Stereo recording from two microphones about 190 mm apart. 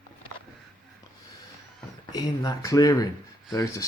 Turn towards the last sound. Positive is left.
turn(degrees=20)  # may be behind; listen again after turning